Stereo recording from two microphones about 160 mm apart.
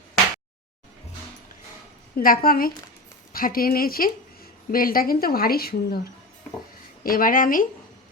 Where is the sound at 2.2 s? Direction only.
65° left (ahead or behind).